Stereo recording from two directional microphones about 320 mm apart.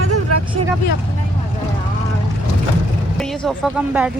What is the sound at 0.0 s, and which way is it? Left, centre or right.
Vehicle, right.